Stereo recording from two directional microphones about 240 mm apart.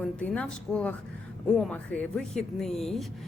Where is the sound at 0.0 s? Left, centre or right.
Centre.